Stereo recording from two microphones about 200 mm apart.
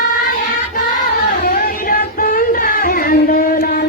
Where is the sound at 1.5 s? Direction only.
45° left (ahead or behind).